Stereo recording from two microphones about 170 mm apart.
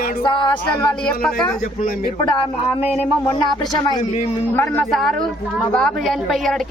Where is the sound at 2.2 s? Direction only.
25° left (ahead or behind).